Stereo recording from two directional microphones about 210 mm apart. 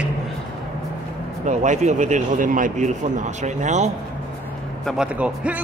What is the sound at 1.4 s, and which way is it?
Speech, 35° right (ahead or behind).